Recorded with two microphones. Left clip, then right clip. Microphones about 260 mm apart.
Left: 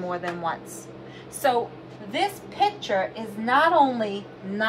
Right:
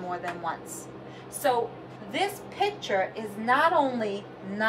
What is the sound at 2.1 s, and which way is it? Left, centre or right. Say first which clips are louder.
Speech: left 4 dB; centre.